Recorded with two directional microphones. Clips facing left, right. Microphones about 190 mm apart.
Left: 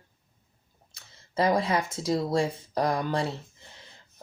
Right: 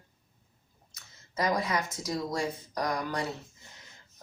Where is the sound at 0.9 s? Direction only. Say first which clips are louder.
Left 6 dB; 30° left (ahead or behind).